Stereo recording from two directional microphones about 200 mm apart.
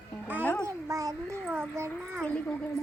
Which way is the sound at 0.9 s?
15° right (ahead or behind).